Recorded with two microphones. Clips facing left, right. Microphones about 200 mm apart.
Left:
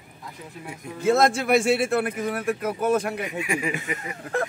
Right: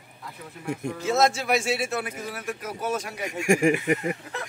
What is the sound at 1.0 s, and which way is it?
Speech, 55° left (ahead or behind).